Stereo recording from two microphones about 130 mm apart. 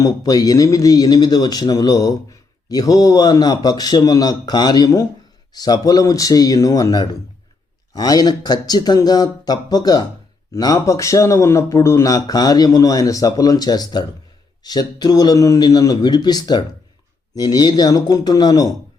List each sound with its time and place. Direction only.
0.0 s speech: 30° left (ahead or behind)